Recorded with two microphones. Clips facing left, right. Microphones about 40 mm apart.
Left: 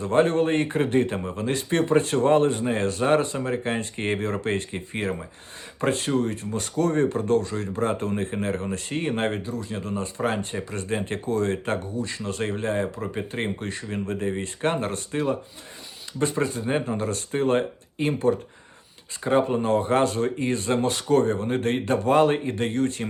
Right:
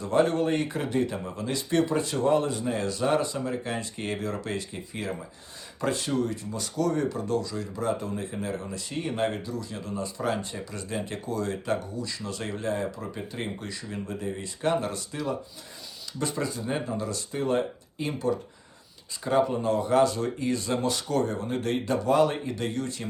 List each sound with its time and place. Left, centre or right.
0.0 s speech: left